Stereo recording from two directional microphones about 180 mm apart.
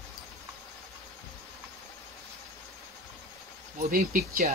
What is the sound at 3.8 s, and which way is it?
Speech, 50° right (ahead or behind).